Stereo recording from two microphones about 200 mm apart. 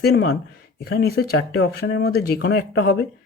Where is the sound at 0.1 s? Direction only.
90° left.